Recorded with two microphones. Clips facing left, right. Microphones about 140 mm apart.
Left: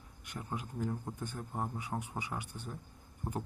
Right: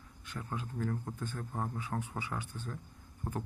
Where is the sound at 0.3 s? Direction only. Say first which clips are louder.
Right 1 dB; 15° left (ahead or behind).